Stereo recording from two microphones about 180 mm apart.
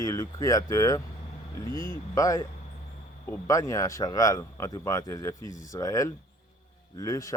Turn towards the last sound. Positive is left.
turn(degrees=20)  # may be behind; listen again after turning